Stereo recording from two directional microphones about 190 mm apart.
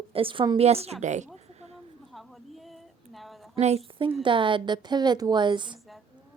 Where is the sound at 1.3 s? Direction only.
35° right (ahead or behind).